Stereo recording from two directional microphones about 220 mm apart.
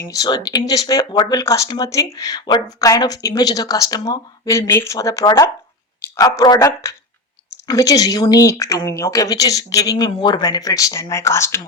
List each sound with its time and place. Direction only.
0.0 s speech: 15° left (ahead or behind)